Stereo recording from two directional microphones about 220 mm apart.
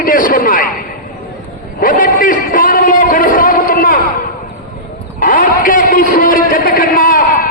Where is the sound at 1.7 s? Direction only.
40° left (ahead or behind).